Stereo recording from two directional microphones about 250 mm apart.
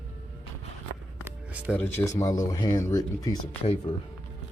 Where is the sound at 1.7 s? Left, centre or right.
Centre; by 3.9 s left.